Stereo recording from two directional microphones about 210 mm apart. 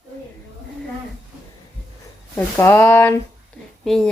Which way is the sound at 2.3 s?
10° left (ahead or behind).